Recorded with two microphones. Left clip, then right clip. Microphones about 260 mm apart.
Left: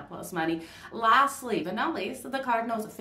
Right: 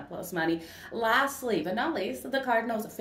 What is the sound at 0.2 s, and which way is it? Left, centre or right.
A woman's voice, centre.